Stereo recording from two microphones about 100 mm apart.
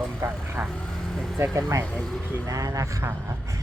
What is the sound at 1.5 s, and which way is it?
Speech, 30° right (ahead or behind).